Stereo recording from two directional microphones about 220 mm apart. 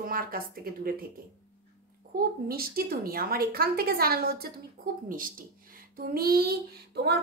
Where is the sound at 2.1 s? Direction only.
45° right (ahead or behind).